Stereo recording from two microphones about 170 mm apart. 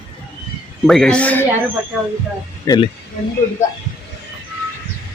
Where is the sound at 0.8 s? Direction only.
Centre (ahead or behind).